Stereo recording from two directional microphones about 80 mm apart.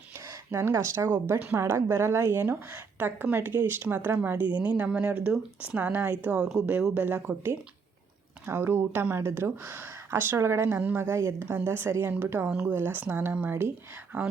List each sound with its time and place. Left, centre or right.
0.3 s speech: right
1.1 s a woman's voice: right
6.4 s speech: centre
8.4 s speech: right
11.0 s a woman's voice: right